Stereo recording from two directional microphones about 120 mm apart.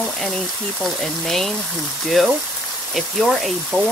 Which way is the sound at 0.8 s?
Centre (ahead or behind).